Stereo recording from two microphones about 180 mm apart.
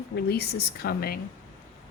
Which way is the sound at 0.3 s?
60° left (ahead or behind).